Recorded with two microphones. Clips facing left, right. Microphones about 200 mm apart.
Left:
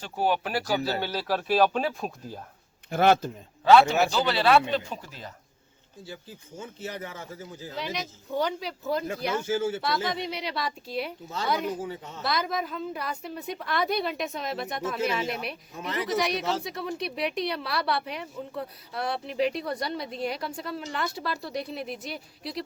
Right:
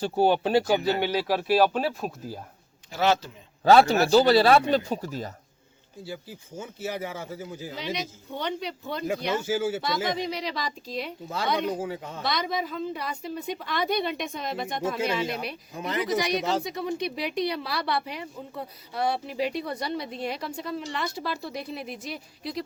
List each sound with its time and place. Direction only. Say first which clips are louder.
0.0 s speech: right 5 dB; 30° right (ahead or behind); by 2.4 s 5° right (ahead or behind)
2.9 s a man's voice: left 3 dB; 55° left (ahead or behind)
3.6 s speech: right 1 dB; 40° right (ahead or behind)
6.1 s speech: right 4 dB; 10° right (ahead or behind)
8.4 s speech: left 2 dB; centre (ahead or behind)
9.8 s speech: right 1 dB; centre (ahead or behind)
11.8 s speech: right 3 dB; 90° right
12.2 s speech: even; centre (ahead or behind)